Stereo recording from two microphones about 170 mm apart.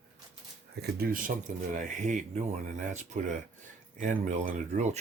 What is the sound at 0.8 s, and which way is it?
Speech, 60° right (ahead or behind).